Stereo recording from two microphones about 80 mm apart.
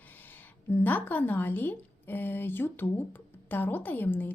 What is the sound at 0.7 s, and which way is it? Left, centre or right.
Speech, left.